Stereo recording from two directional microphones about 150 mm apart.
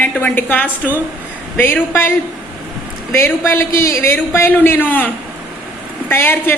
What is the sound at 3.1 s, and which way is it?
A woman's voice, 15° left (ahead or behind).